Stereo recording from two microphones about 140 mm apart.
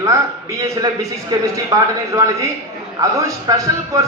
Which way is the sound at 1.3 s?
25° right (ahead or behind).